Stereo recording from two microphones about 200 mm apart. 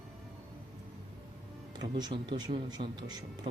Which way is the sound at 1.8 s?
20° right (ahead or behind).